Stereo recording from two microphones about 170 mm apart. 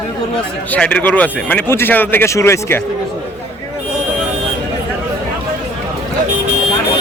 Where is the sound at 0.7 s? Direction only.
5° left (ahead or behind).